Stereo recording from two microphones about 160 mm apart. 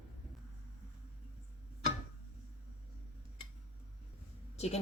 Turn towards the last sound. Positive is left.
turn(degrees=40)  # may be behind; listen again after turning